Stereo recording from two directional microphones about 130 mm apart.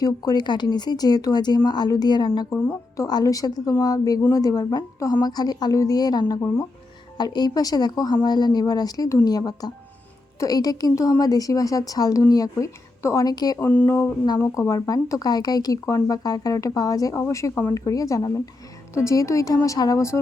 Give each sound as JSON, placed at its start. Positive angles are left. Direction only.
{"t": 0.0, "sound": "speech", "side_deg": 30}
{"t": 13.6, "sound": "speech", "side_deg": 15}